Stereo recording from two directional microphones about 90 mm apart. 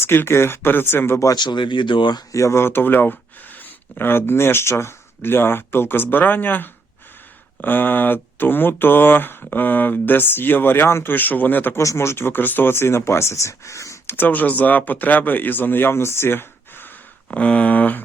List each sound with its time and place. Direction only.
0.0 s speech: 25° left (ahead or behind)
1.3 s speech: 60° left (ahead or behind)
2.3 s speech: 35° left (ahead or behind)
11.8 s speech: 35° left (ahead or behind)
14.2 s a sound: 20° left (ahead or behind)
14.6 s speech: 20° left (ahead or behind)
17.3 s a sound: 15° left (ahead or behind)